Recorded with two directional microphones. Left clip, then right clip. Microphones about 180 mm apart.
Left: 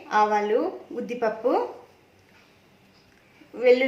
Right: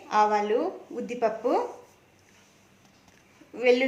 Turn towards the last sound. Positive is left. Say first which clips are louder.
# left 3 dB
turn(degrees=-15)  # may be behind; listen again after turning